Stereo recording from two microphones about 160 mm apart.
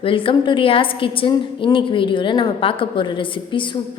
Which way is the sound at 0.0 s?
35° left (ahead or behind).